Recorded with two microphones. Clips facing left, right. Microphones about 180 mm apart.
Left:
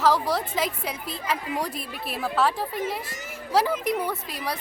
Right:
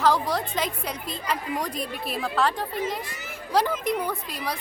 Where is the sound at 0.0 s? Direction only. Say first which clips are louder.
Even; centre (ahead or behind).